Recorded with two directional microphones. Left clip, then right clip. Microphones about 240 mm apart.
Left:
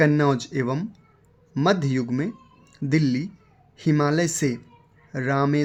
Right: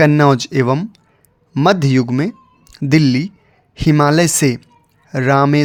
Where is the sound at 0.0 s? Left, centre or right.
Right.